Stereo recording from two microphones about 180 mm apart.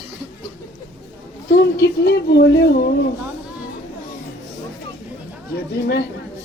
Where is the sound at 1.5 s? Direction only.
60° left (ahead or behind).